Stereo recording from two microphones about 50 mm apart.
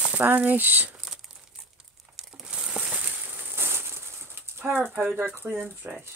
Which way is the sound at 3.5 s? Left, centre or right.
Right.